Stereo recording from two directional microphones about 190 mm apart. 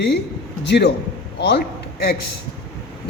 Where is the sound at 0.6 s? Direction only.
60° left (ahead or behind).